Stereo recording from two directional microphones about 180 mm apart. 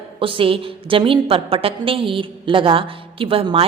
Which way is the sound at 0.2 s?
30° right (ahead or behind).